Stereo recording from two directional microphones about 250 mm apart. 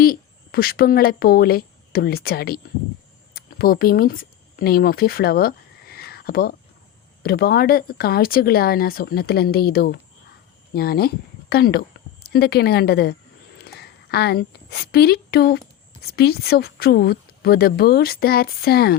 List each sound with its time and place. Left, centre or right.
0.0 s a woman's voice: left